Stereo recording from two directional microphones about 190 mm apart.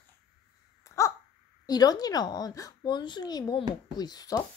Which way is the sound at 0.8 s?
15° left (ahead or behind).